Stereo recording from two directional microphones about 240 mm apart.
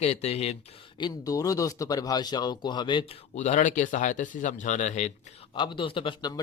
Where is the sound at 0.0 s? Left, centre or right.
Left.